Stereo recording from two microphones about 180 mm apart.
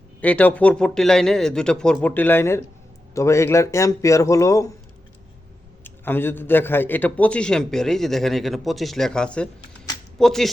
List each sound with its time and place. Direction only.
0.2 s a man's voice: 10° left (ahead or behind)
5.8 s a man's voice: 10° left (ahead or behind)